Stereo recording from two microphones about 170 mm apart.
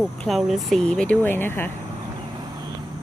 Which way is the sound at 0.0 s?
Centre (ahead or behind).